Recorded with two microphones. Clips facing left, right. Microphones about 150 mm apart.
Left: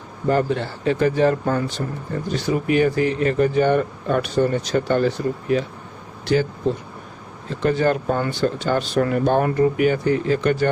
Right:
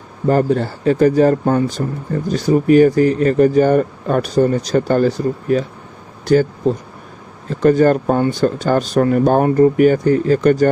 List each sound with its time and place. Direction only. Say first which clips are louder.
0.3 s speech: right 5 dB; 40° right (ahead or behind)